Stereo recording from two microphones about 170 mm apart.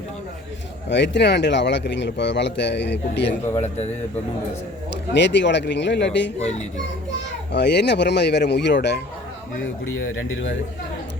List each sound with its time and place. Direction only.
0.9 s a man's voice: 90° left
4.9 s a man's voice: 90° left
7.5 s speech: 80° left